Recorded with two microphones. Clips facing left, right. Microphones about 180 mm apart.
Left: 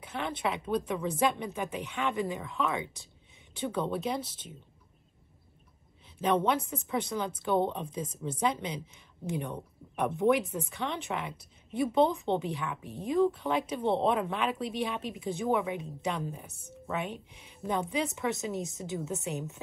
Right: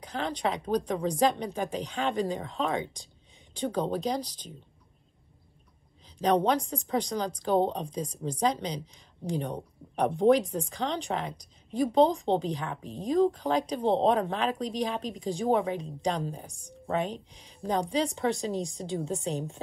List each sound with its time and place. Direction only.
0.0 s a sound: 40° right (ahead or behind)
0.4 s speech: 35° right (ahead or behind)
6.2 s speech: 35° right (ahead or behind)